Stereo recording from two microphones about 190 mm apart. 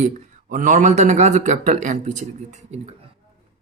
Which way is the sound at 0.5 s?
45° right (ahead or behind).